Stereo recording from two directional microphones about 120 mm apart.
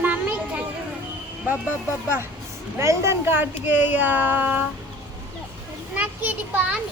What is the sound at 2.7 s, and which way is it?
Speech, 20° right (ahead or behind).